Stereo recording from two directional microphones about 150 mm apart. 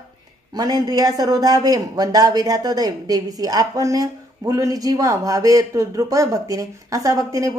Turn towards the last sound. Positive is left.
turn(degrees=-20)  # may be behind; listen again after turning